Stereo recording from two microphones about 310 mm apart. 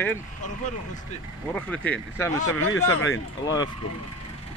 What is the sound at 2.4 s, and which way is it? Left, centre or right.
Speech, left.